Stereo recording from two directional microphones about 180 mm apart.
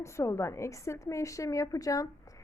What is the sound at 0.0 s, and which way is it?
A woman's voice, 15° left (ahead or behind).